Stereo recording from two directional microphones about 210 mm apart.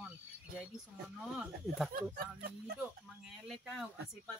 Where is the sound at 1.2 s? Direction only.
Centre (ahead or behind).